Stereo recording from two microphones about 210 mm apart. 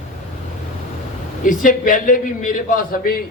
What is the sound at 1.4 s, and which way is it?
A man's voice, 40° left (ahead or behind).